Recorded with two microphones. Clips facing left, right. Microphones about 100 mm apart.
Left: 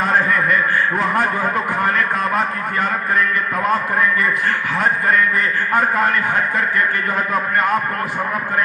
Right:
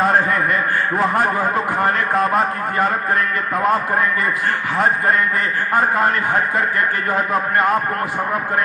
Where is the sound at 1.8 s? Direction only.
30° right (ahead or behind).